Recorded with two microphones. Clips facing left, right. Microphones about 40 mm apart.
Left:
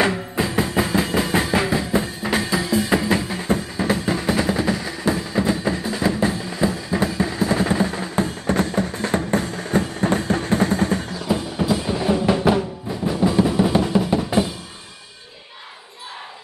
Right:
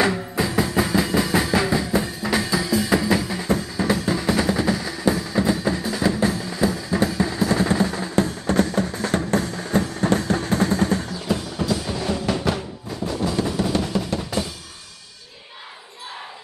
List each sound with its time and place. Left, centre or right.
0.4 s music: left